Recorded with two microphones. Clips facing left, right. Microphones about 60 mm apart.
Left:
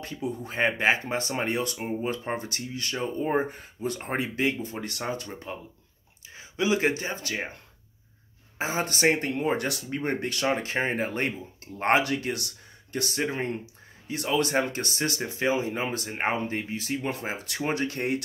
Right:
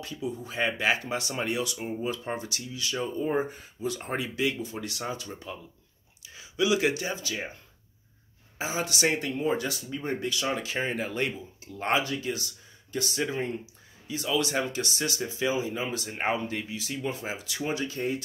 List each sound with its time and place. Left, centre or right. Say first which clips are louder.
0.0 s speech: left 2 dB; left
1.8 s speech: left 2 dB; left
2.0 s speech: left 2 dB; left
3.4 s speech: left 1 dB; left
7.2 s speech: left 2 dB; left
8.5 s speech: left 2 dB; left
9.3 s speech: left 1 dB; left
12.0 s speech: left 3 dB; left
16.2 s speech: left 1 dB; left